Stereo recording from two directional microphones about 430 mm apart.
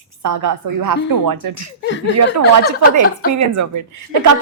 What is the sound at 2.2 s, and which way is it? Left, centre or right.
A woman's voice, right.